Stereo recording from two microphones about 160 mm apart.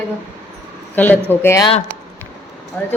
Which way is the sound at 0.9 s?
10° left (ahead or behind).